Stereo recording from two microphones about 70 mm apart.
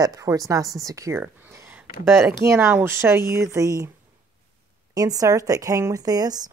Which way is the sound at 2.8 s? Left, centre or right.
Right.